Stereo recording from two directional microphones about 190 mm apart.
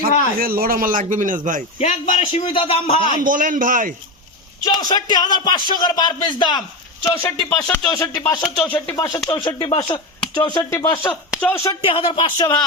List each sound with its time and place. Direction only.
0.3 s speech: 50° right (ahead or behind)
1.8 s a man's voice: 30° left (ahead or behind)
3.0 s speech: 45° right (ahead or behind)
4.6 s speech: 20° left (ahead or behind)
8.4 s speech: 5° left (ahead or behind); by 11.1 s 20° left (ahead or behind)
11.3 s speech: 5° left (ahead or behind)
11.6 s speech: 25° left (ahead or behind)